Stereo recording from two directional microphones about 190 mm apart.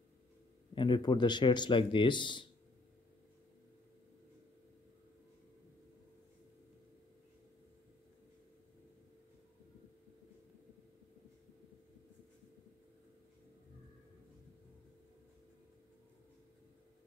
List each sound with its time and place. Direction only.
0.7 s speech: 25° left (ahead or behind)